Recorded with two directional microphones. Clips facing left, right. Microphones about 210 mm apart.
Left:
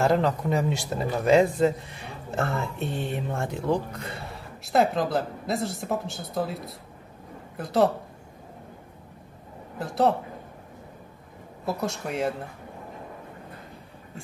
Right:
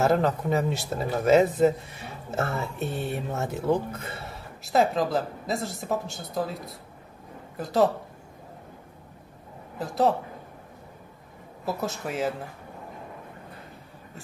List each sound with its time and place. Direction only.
0.0 s a woman's voice: 5° right (ahead or behind)
9.8 s a woman's voice: centre (ahead or behind)
11.6 s a woman's voice: centre (ahead or behind)